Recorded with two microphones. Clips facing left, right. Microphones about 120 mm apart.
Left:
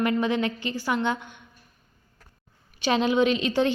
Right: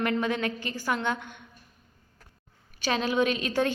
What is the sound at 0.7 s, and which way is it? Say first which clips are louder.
Speech: left 3 dB; 15° left (ahead or behind).